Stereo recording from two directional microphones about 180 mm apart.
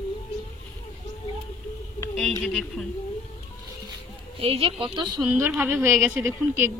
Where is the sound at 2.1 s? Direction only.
Centre (ahead or behind).